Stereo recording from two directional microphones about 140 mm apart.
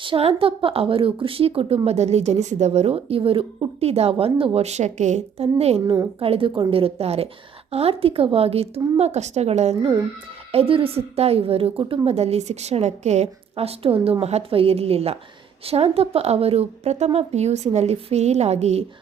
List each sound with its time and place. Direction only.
0.0 s a woman's voice: 40° right (ahead or behind)
5.8 s a woman's voice: 25° right (ahead or behind)
6.1 s a woman's voice: 40° right (ahead or behind)